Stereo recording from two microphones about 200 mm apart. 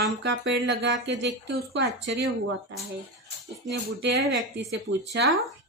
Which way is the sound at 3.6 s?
55° right (ahead or behind).